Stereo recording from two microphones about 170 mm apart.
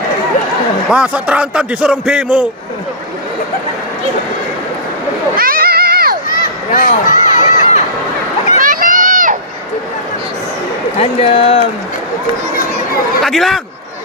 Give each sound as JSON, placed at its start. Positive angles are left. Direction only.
{"t": 0.9, "sound": "a man's voice", "side_deg": -5}
{"t": 5.4, "sound": "a sound", "side_deg": -60}
{"t": 6.7, "sound": "a sound", "side_deg": 50}
{"t": 8.6, "sound": "run", "side_deg": -55}
{"t": 11.0, "sound": "speech", "side_deg": 35}
{"t": 13.2, "sound": "a man's voice", "side_deg": 0}